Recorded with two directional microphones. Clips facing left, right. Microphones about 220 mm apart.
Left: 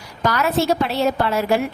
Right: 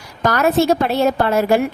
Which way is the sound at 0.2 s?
50° right (ahead or behind).